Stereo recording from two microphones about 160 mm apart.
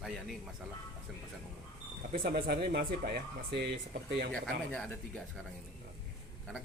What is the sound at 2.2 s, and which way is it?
Speech, 80° right.